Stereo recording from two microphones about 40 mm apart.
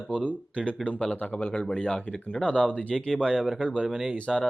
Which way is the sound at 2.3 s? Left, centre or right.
Centre.